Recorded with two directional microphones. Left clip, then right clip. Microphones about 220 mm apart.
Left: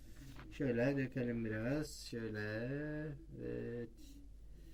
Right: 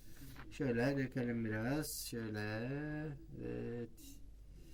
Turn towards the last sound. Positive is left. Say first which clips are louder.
# even
turn(degrees=-10)  # may be behind; listen again after turning